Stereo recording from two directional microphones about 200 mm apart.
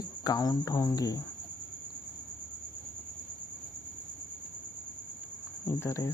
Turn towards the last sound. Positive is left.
turn(degrees=15)  # may be behind; listen again after turning